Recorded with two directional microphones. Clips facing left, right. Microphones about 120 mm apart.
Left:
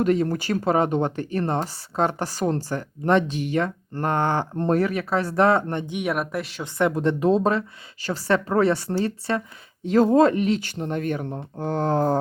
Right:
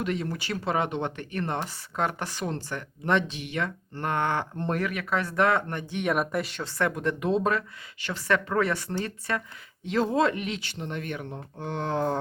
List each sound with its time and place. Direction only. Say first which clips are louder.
0.0 s speech: left 9 dB; 40° left (ahead or behind)
5.8 s speech: left 3 dB; 15° left (ahead or behind)
6.1 s speech: right 2 dB; centre (ahead or behind)
6.7 s speech: left 6 dB; 25° left (ahead or behind)
9.8 s speech: left 7 dB; 45° left (ahead or behind)